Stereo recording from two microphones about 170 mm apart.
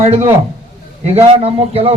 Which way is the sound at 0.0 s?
40° right (ahead or behind).